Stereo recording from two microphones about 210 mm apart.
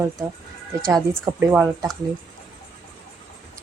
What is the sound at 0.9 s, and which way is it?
Speech, 10° right (ahead or behind).